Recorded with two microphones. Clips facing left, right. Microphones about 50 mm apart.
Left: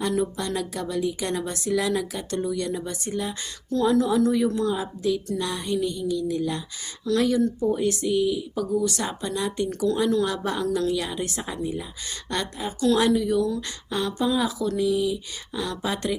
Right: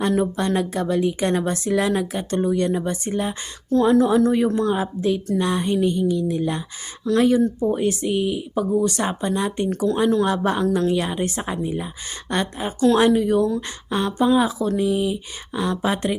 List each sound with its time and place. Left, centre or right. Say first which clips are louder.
0.0 s speech: right 5 dB; right